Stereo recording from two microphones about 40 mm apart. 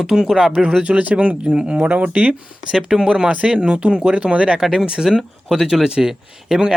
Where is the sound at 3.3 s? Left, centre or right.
Right.